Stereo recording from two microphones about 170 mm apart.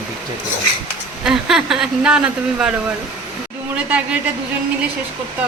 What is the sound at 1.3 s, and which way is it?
Speech, 5° right (ahead or behind).